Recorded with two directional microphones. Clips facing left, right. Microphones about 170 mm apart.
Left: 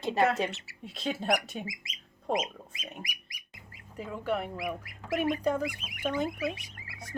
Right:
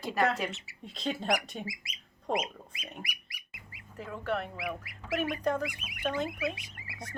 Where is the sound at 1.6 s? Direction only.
20° left (ahead or behind).